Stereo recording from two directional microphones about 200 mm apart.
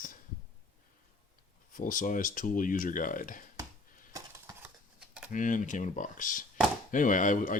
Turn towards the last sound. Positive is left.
turn(degrees=40)  # may be behind; listen again after turning